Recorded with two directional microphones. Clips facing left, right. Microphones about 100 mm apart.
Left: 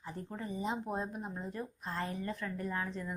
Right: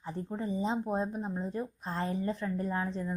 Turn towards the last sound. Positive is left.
turn(degrees=-30)  # may be behind; listen again after turning